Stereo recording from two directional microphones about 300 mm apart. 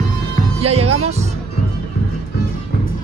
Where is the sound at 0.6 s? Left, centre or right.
Centre.